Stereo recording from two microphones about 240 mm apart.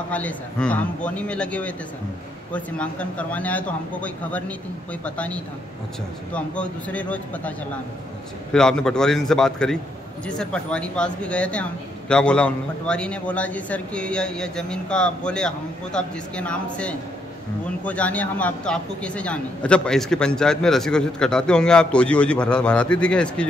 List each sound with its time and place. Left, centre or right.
0.1 s a man's voice: centre
8.5 s a man's voice: centre